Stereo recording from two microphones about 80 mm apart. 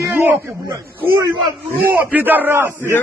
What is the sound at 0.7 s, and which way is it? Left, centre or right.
Speech, right.